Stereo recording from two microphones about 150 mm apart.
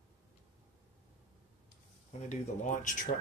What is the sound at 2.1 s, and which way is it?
Speech, 55° left (ahead or behind).